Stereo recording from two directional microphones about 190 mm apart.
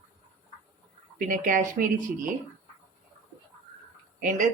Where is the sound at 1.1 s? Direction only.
45° right (ahead or behind).